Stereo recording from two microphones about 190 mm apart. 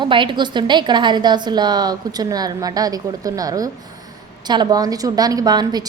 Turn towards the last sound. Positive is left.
turn(degrees=-20)  # may be behind; listen again after turning